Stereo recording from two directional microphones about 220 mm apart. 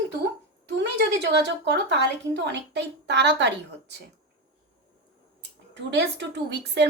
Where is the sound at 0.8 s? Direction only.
50° right (ahead or behind).